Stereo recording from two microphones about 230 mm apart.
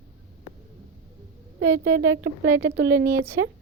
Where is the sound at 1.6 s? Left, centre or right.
Right.